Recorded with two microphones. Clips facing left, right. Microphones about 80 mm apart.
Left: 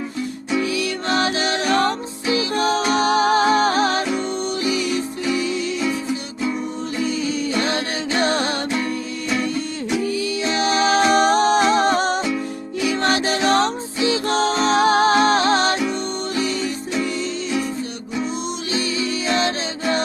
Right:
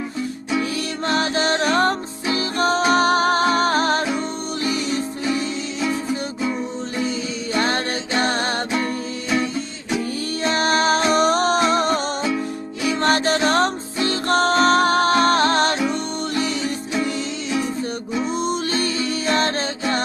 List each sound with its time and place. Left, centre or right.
0.7 s music: right
7.5 s music: right
10.4 s music: right
11.8 s music: left
12.8 s music: right
17.0 s music: right
18.7 s music: right